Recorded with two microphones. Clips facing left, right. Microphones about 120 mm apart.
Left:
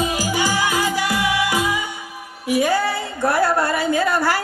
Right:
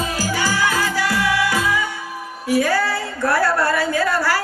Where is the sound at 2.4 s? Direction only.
20° left (ahead or behind).